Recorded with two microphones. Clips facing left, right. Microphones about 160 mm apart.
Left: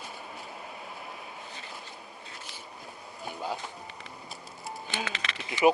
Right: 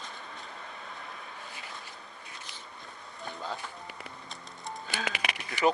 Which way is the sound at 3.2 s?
10° left (ahead or behind).